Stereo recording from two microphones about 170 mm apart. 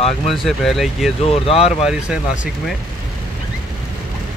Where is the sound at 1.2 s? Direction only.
35° left (ahead or behind).